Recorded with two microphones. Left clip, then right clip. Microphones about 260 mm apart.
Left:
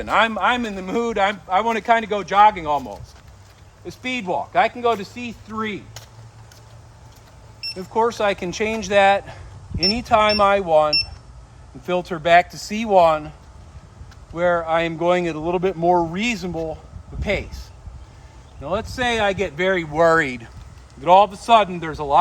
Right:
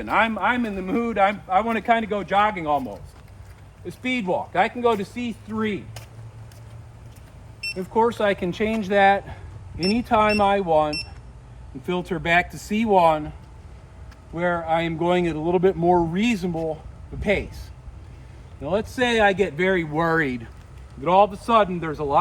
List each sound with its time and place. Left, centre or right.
0.0 s speech: left
3.8 s speech: centre
7.8 s speech: left
14.3 s speech: centre
18.6 s speech: centre; by 22.2 s left